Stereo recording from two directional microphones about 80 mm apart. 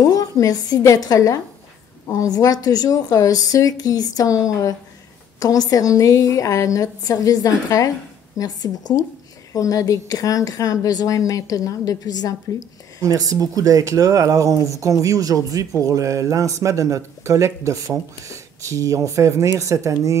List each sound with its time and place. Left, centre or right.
0.0 s a woman's voice: left
13.0 s speech: right